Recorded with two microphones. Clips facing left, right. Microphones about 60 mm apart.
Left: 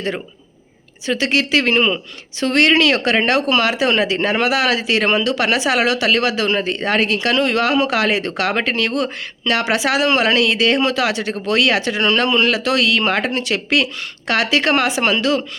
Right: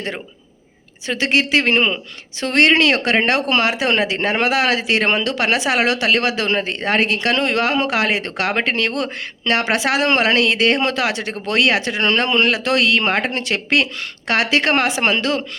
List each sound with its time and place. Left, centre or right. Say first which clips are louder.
1.0 s speech: even; right